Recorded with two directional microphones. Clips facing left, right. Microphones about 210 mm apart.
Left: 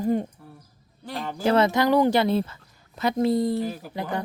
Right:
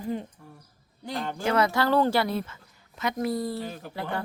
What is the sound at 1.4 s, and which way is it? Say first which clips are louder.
Speech: left 4 dB; 30° left (ahead or behind).